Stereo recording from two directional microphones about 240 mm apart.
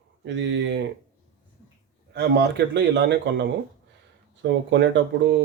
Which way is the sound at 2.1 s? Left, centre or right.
Right.